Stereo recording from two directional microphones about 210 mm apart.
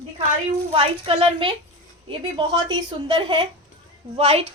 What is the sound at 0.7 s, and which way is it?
A woman's voice, 25° right (ahead or behind).